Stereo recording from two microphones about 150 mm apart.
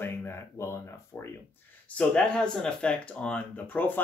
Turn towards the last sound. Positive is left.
turn(degrees=10)  # may be behind; listen again after turning